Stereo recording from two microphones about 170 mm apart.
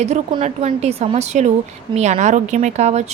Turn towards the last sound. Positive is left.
turn(degrees=-40)  # may be behind; listen again after turning